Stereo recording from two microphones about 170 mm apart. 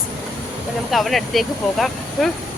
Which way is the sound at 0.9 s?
Centre (ahead or behind).